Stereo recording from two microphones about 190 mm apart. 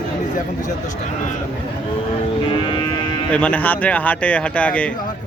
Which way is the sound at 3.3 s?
5° left (ahead or behind).